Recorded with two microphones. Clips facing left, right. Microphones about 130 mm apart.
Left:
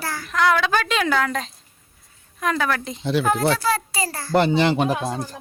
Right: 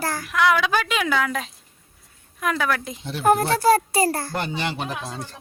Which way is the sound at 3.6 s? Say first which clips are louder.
Right 6 dB; 50° right (ahead or behind).